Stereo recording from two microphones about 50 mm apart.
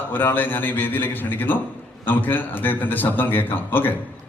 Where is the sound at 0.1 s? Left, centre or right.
Left.